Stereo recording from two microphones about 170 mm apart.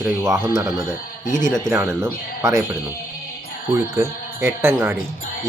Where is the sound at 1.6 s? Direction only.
15° right (ahead or behind).